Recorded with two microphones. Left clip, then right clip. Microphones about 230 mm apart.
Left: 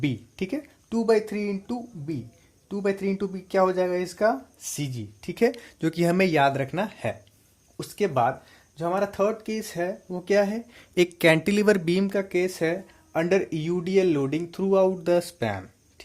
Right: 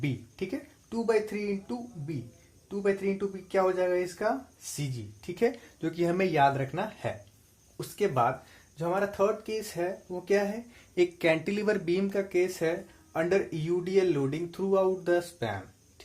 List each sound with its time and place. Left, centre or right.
0.0 s speech: left